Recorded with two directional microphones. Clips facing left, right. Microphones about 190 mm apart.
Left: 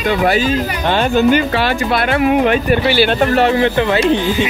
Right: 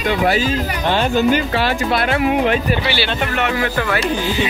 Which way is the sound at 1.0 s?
65° left (ahead or behind).